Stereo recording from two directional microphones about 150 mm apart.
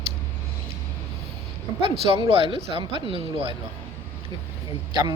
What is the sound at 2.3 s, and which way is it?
Speech, 35° right (ahead or behind).